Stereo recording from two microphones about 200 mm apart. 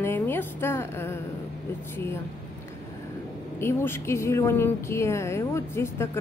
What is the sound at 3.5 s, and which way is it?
Speech, 10° left (ahead or behind).